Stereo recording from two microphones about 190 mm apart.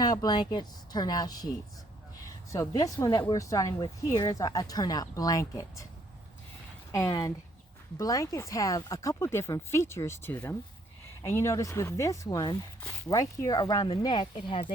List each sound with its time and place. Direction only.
0.0 s speech: 20° left (ahead or behind)
2.5 s speech: 15° left (ahead or behind)
6.9 s speech: 20° left (ahead or behind)